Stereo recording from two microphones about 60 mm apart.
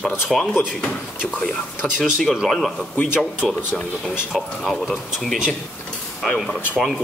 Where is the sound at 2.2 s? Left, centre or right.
Centre.